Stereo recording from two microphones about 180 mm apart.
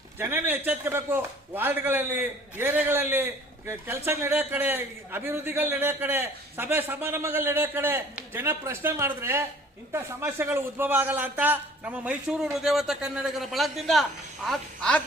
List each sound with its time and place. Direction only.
0.2 s a man's voice: 10° right (ahead or behind); by 15.0 s 5° left (ahead or behind)